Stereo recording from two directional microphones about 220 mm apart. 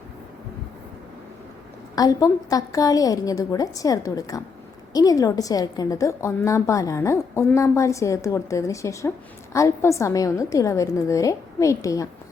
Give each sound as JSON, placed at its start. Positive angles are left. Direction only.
{"t": 2.0, "sound": "a woman's voice", "side_deg": 15}